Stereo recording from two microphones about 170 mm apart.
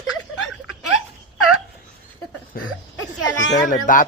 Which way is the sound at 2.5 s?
60° left (ahead or behind).